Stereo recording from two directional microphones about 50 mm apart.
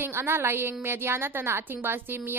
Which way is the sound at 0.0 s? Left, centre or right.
Right.